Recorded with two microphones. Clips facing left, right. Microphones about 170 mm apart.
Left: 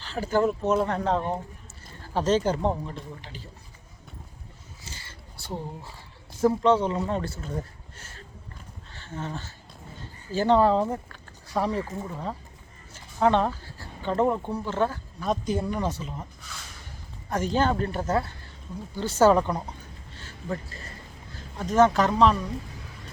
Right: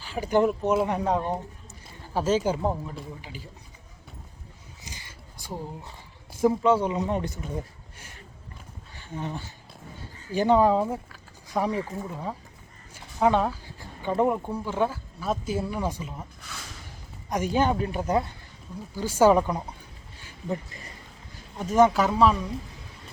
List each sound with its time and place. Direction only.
0.0 s speech: 15° right (ahead or behind)
4.8 s a sound: 15° right (ahead or behind)
6.4 s speech: 10° right (ahead or behind)
17.2 s speech: 10° right (ahead or behind)
20.1 s a sound: 15° right (ahead or behind)
21.3 s speech: 10° right (ahead or behind)